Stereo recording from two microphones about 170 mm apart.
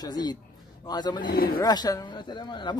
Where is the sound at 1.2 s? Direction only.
60° left (ahead or behind).